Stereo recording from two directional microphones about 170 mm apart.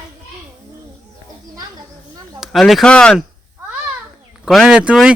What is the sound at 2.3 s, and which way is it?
Speech, centre (ahead or behind).